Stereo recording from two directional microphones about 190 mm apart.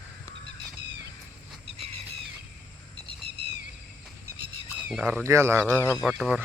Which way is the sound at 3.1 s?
30° right (ahead or behind).